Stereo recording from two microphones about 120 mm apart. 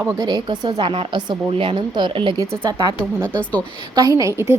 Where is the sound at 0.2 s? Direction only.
35° right (ahead or behind).